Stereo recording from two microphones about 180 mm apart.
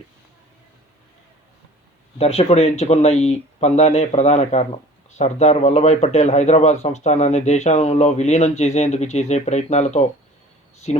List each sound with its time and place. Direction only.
2.1 s speech: 35° left (ahead or behind)